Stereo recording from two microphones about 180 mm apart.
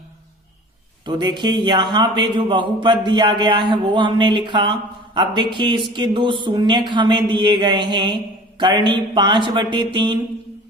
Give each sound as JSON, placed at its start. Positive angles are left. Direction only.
{"t": 1.0, "sound": "a man's voice", "side_deg": -25}